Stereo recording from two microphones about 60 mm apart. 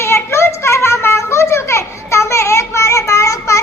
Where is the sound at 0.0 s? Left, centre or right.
Left.